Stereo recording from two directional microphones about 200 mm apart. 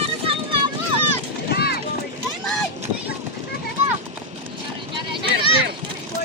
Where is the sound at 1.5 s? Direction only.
50° left (ahead or behind).